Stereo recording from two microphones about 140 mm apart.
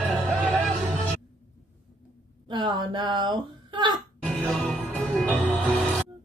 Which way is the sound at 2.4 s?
35° right (ahead or behind).